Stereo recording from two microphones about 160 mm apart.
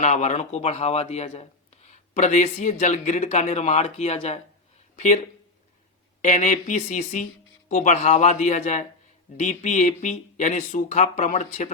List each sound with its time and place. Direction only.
0.0 s speech: 45° left (ahead or behind)
6.2 s speech: 50° left (ahead or behind)